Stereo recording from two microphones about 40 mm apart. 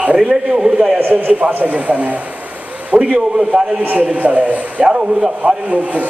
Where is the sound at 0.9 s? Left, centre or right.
Right.